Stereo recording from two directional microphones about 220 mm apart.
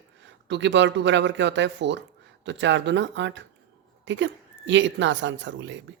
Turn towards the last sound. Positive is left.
turn(degrees=-55)  # may be behind; listen again after turning